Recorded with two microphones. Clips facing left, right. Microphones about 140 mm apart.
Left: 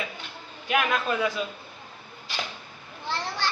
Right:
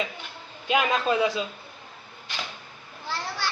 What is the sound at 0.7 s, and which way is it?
Speech, 20° right (ahead or behind).